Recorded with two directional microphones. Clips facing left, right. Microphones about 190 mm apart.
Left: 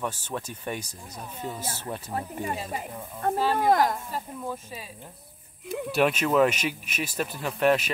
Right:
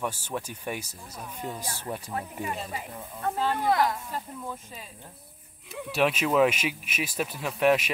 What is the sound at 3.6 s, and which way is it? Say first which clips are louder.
Speech: left 2 dB; 45° left (ahead or behind).